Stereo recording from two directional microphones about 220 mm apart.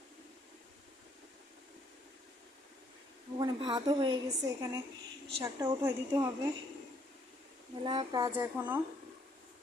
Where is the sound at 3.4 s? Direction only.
20° right (ahead or behind).